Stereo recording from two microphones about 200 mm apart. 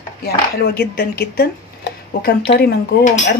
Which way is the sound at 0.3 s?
50° left (ahead or behind).